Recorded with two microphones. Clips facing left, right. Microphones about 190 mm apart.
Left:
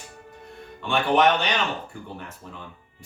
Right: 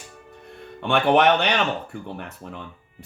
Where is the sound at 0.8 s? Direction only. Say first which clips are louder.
Right 3 dB; 65° right (ahead or behind).